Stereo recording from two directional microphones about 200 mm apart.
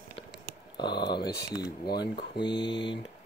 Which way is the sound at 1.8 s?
55° left (ahead or behind).